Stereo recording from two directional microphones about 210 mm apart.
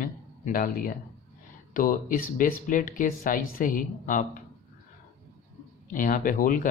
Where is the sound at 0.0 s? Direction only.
40° left (ahead or behind).